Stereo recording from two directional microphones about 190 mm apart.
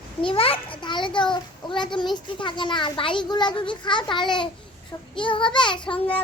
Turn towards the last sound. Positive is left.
turn(degrees=25)  # may be behind; listen again after turning